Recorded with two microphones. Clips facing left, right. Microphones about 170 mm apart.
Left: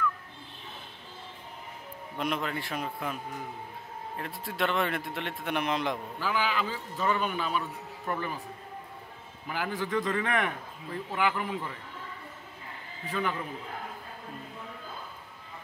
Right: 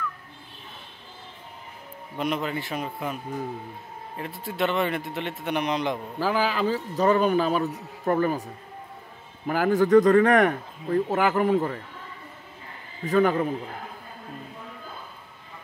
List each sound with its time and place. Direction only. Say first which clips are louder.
2.1 s speech: right 4 dB; centre (ahead or behind)
4.2 s speech: right 5 dB; centre (ahead or behind)
6.1 s a man's voice: right 7 dB; 40° right (ahead or behind)
9.5 s speech: right 13 dB; 45° right (ahead or behind)
13.0 s speech: right 11 dB; 45° right (ahead or behind)